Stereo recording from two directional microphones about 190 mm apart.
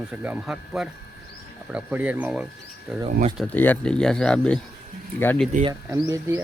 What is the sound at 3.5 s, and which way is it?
Speech, 10° left (ahead or behind).